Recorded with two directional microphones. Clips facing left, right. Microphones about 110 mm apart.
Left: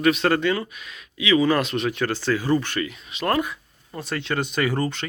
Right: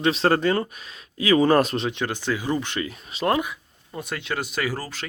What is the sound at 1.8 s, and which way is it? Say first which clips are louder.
Speech: left 2 dB; 20° right (ahead or behind).